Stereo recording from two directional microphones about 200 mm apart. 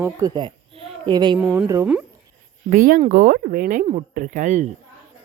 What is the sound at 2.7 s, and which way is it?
Speech, 45° right (ahead or behind).